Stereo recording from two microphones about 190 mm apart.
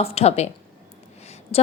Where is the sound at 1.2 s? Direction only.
35° left (ahead or behind).